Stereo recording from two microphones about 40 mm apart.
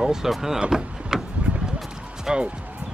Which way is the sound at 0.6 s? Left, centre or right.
Centre.